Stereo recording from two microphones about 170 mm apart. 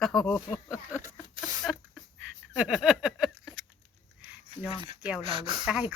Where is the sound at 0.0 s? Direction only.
5° left (ahead or behind).